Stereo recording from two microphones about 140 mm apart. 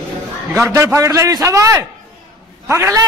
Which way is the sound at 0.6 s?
20° right (ahead or behind).